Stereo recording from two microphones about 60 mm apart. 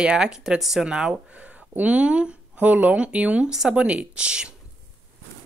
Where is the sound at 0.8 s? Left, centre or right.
Centre.